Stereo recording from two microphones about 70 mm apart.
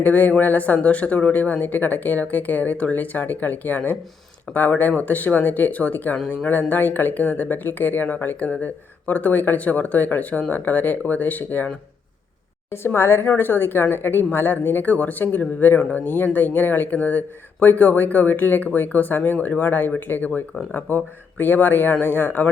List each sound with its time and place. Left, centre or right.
0.0 s speech: left
12.7 s a woman's voice: left